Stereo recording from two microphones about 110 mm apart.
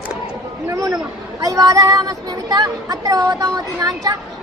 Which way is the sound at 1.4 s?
30° right (ahead or behind).